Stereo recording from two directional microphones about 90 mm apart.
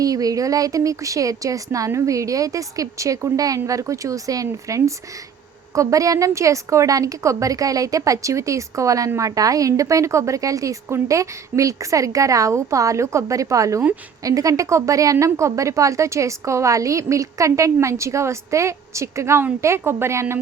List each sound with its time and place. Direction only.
0.0 s a woman's voice: 40° right (ahead or behind)